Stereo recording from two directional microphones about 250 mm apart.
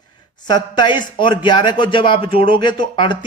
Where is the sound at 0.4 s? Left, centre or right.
Centre.